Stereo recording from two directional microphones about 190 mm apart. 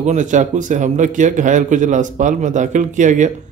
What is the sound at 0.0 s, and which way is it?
A man's voice, 40° right (ahead or behind).